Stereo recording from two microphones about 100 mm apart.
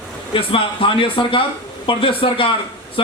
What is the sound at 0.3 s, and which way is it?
Speech, 65° left (ahead or behind).